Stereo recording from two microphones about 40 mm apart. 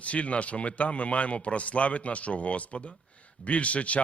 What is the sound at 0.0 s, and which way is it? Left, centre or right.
Speech, left.